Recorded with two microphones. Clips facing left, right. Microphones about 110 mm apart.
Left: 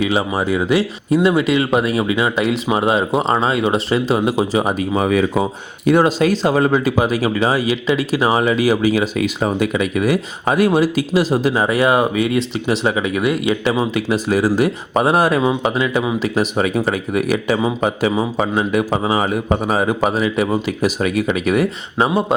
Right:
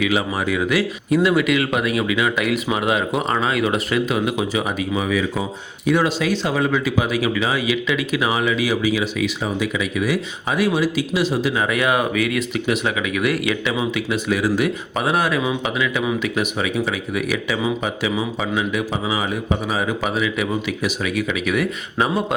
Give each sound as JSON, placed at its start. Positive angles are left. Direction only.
{"t": 0.0, "sound": "speech", "side_deg": 30}
{"t": 13.7, "sound": "speech", "side_deg": 40}
{"t": 22.0, "sound": "speech", "side_deg": 25}